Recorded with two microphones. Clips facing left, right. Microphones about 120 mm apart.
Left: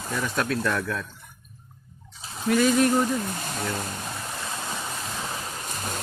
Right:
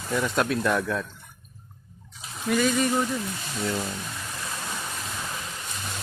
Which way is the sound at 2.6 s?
10° left (ahead or behind).